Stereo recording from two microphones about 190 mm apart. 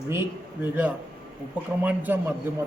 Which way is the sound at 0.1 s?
10° right (ahead or behind).